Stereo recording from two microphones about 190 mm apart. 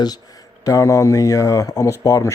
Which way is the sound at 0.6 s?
15° left (ahead or behind).